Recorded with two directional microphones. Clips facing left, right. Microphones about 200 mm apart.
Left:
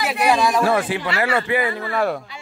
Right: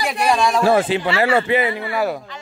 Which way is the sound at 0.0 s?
Centre (ahead or behind).